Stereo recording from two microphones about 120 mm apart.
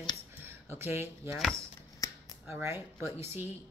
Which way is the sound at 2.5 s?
20° right (ahead or behind).